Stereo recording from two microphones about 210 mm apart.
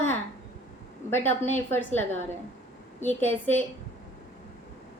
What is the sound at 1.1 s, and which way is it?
A woman's voice, 10° left (ahead or behind).